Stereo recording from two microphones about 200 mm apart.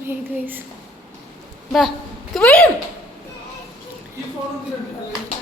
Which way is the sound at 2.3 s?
5° left (ahead or behind).